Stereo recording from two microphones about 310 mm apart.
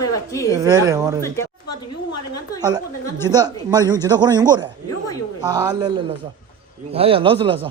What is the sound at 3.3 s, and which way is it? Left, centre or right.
A man's voice, centre.